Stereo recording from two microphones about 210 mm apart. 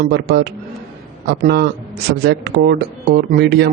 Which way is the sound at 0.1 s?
50° right (ahead or behind).